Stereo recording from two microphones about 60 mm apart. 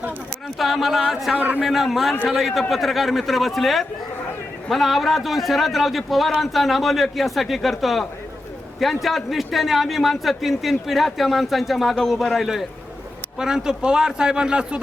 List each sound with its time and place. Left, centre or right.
0.6 s a man's voice: centre
1.4 s a man's voice: right
1.6 s a man's voice: centre